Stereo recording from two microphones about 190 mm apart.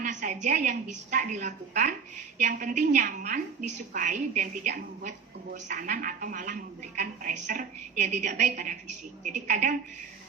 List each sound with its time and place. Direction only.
0.0 s a woman's voice: 40° right (ahead or behind)